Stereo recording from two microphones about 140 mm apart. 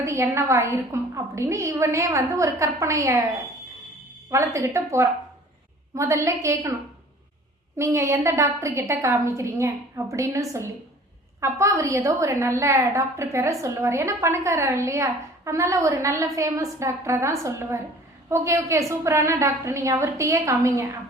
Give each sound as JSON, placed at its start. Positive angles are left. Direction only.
{"t": 0.0, "sound": "a woman's voice", "side_deg": -20}
{"t": 4.3, "sound": "a woman's voice", "side_deg": -20}
{"t": 7.8, "sound": "a woman's voice", "side_deg": -20}